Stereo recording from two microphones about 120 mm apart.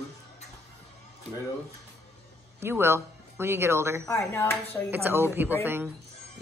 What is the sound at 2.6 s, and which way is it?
Speech, 20° right (ahead or behind).